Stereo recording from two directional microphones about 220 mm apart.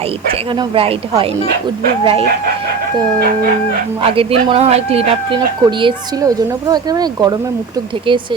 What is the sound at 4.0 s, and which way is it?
Speech, 25° right (ahead or behind).